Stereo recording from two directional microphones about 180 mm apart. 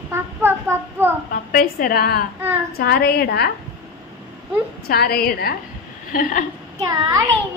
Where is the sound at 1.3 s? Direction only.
50° left (ahead or behind).